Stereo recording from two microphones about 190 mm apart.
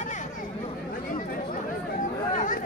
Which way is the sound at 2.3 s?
45° left (ahead or behind).